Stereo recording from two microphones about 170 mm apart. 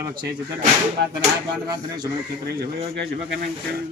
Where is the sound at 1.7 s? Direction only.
25° right (ahead or behind).